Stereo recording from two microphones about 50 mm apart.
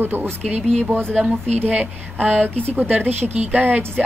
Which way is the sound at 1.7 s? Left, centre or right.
Right.